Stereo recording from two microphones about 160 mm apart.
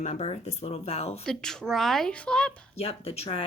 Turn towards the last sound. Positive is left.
turn(degrees=35)  # may be behind; listen again after turning